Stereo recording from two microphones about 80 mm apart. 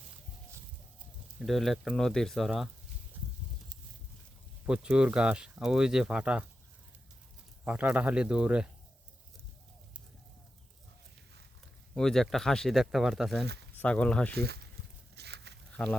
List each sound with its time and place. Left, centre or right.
1.4 s speech: centre
4.6 s speech: centre
7.6 s speech: right
11.9 s speech: centre
13.7 s speech: centre
15.7 s a sound: centre